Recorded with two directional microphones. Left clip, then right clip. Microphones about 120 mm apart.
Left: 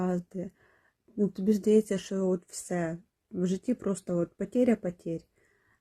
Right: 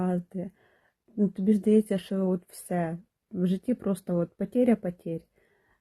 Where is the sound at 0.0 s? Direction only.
30° left (ahead or behind).